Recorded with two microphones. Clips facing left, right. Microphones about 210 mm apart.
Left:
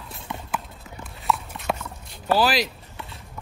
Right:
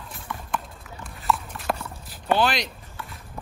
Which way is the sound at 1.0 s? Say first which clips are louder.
Even; centre (ahead or behind).